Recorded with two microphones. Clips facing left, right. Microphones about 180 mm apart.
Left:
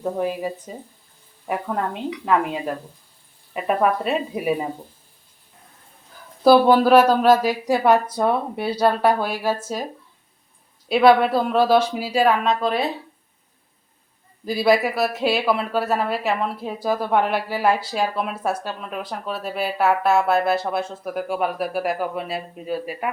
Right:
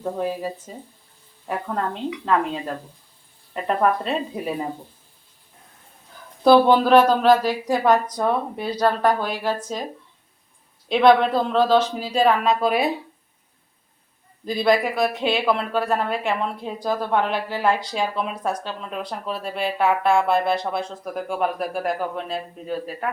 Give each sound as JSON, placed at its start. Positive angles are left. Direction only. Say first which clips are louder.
{"t": 0.0, "sound": "speech", "louder": "left 2 dB", "side_deg": 15}
{"t": 6.4, "sound": "speech", "louder": "left 1 dB", "side_deg": 5}
{"t": 10.8, "sound": "speech", "louder": "left 1 dB", "side_deg": 5}
{"t": 14.4, "sound": "speech", "louder": "left 1 dB", "side_deg": 5}